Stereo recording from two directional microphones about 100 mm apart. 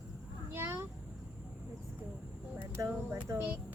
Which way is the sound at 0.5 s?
25° right (ahead or behind).